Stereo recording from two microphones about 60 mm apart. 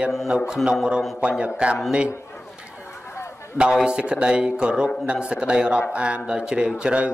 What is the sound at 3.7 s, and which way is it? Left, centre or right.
A man's voice, centre.